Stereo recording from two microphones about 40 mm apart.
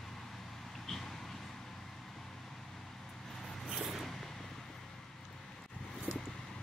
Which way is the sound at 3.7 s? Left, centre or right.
Centre.